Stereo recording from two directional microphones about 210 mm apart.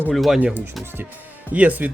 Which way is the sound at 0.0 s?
Centre (ahead or behind).